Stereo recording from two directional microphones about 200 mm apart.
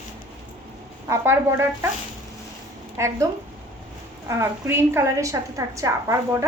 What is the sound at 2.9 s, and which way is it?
Speech, 15° right (ahead or behind).